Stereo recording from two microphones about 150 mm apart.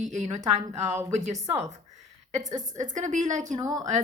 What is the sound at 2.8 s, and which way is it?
Speech, 55° right (ahead or behind).